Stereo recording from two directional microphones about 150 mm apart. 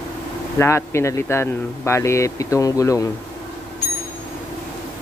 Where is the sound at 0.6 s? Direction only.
15° left (ahead or behind).